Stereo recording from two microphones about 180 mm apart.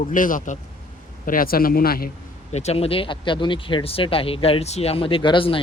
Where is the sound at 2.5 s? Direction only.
35° left (ahead or behind).